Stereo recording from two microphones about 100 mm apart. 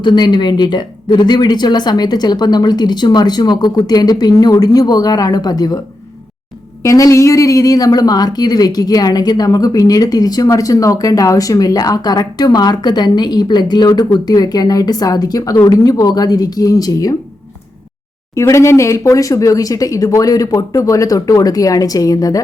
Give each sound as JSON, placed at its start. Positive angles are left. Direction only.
{"t": 0.0, "sound": "speech", "side_deg": 50}
{"t": 6.8, "sound": "speech", "side_deg": 35}
{"t": 18.3, "sound": "speech", "side_deg": 30}